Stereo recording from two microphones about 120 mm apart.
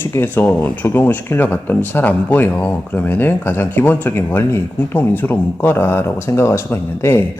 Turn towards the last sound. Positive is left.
turn(degrees=20)  # may be behind; listen again after turning